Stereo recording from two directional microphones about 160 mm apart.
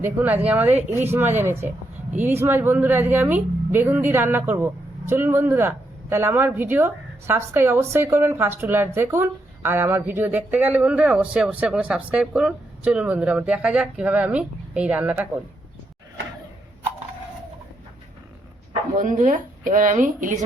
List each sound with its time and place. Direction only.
0.0 s a woman's voice: 10° right (ahead or behind)
18.9 s a woman's voice: 50° right (ahead or behind)